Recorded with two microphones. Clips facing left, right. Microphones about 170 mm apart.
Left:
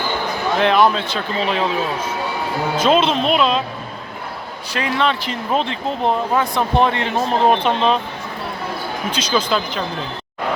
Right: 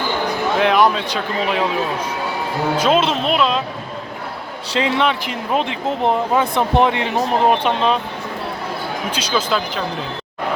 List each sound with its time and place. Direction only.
0.6 s speech: 10° right (ahead or behind)
2.7 s speech: 5° right (ahead or behind)
4.8 s speech: 20° right (ahead or behind)
9.1 s speech: 5° right (ahead or behind)